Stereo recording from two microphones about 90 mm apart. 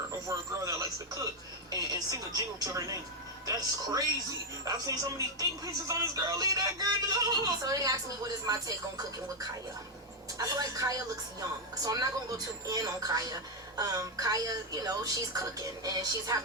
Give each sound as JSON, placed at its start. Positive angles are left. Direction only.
{"t": 0.3, "sound": "a woman's voice", "side_deg": -40}
{"t": 10.3, "sound": "a woman's voice", "side_deg": -40}